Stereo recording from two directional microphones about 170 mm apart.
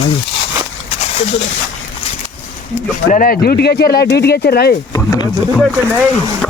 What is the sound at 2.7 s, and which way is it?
Speech, 50° left (ahead or behind).